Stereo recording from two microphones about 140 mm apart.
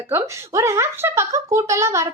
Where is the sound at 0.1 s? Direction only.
20° right (ahead or behind).